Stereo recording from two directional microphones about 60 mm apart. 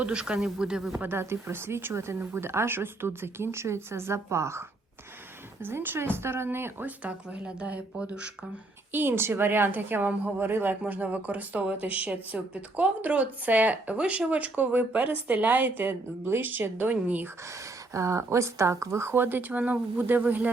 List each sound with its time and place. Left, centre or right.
0.0 s speech: centre
1.0 s speech: right
5.6 s a woman's voice: right
6.8 s a woman's voice: right
8.9 s a woman's voice: right
17.9 s speech: right